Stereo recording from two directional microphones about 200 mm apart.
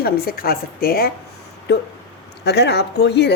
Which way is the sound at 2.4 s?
55° left (ahead or behind).